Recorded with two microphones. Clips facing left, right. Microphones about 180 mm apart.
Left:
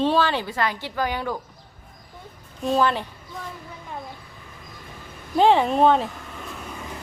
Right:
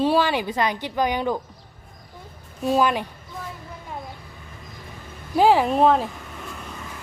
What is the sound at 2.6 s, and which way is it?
Speech, 10° right (ahead or behind).